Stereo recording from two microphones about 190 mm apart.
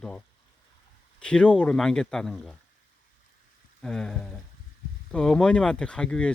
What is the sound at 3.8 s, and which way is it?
Speech, 5° left (ahead or behind).